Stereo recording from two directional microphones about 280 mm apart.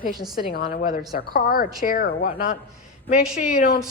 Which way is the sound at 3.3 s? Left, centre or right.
Left.